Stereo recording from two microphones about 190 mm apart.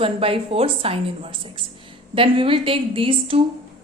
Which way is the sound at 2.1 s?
30° right (ahead or behind).